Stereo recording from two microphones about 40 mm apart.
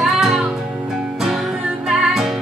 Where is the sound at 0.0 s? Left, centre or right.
Centre.